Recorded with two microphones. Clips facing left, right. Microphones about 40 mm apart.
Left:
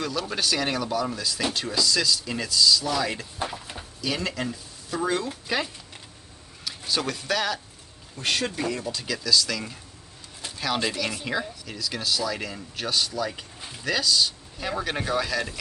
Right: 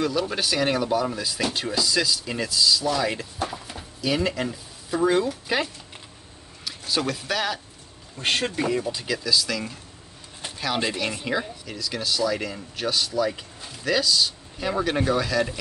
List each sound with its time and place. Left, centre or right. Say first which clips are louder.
0.0 s speech: right 3 dB; centre
6.9 s speech: right 1 dB; centre
8.2 s speech: right 2 dB; right; by 15.5 s centre